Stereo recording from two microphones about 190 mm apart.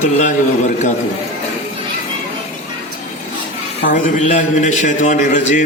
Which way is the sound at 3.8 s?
45° left (ahead or behind).